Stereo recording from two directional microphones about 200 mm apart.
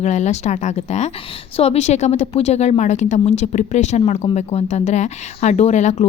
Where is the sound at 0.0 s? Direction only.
35° left (ahead or behind).